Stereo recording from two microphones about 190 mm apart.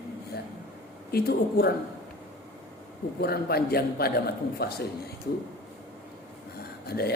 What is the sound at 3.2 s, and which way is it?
A man's voice, 55° left (ahead or behind).